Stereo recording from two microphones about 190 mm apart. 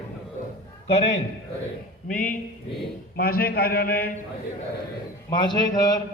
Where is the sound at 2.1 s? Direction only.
45° left (ahead or behind).